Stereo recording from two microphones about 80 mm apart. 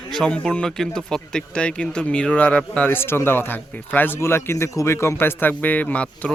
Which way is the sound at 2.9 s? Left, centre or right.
Left.